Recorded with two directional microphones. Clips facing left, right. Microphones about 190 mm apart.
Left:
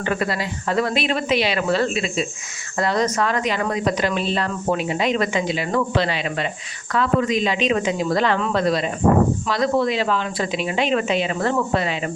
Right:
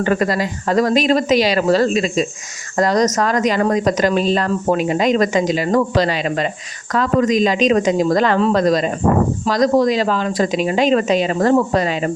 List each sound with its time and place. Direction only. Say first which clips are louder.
0.0 s speech: right 6 dB; 40° right (ahead or behind)